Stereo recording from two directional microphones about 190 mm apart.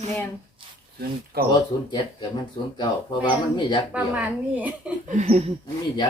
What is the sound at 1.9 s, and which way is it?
Speech, 25° left (ahead or behind).